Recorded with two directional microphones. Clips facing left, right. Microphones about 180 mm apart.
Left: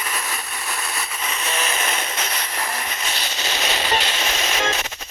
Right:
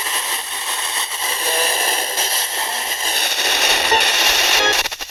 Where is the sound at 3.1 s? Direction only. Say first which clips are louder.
Right 6 dB; 65° right (ahead or behind).